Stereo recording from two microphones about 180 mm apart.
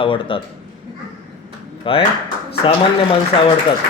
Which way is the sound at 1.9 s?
30° left (ahead or behind).